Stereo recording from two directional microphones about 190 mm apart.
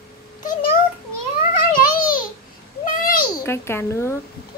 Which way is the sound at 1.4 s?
45° left (ahead or behind).